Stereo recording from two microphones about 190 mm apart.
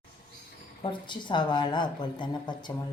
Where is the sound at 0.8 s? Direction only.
25° left (ahead or behind).